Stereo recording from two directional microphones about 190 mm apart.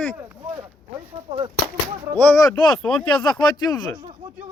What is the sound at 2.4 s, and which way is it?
Speech, 20° left (ahead or behind).